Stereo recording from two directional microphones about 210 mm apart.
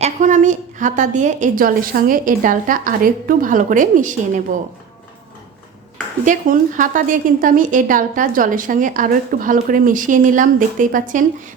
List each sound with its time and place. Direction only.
0.0 s a woman's voice: 35° right (ahead or behind)
6.2 s a woman's voice: 40° right (ahead or behind)